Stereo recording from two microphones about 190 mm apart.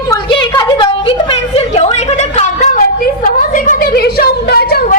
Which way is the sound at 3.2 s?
45° left (ahead or behind).